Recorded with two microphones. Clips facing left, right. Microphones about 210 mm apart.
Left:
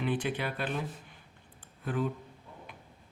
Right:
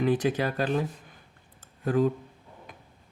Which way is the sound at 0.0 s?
40° right (ahead or behind).